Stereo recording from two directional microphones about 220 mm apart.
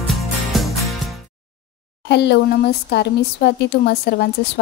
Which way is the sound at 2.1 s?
50° left (ahead or behind).